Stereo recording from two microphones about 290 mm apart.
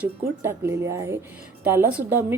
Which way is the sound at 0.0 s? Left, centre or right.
Centre.